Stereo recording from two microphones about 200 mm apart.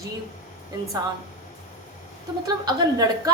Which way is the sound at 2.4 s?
20° right (ahead or behind).